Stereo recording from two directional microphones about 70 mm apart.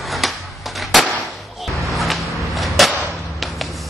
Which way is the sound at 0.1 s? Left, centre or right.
Centre.